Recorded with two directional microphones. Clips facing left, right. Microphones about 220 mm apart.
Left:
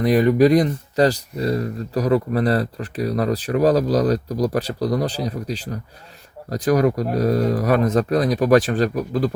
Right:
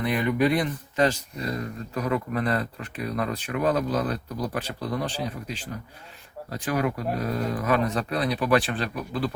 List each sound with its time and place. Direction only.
0.0 s speech: 40° left (ahead or behind)